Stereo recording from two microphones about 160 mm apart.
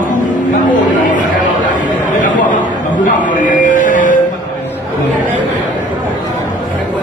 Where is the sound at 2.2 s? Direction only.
55° left (ahead or behind).